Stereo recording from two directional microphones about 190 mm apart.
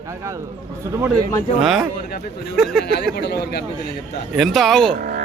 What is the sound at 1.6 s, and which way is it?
Speech, centre (ahead or behind).